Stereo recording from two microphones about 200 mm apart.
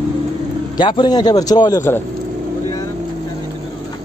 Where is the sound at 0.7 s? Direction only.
25° left (ahead or behind).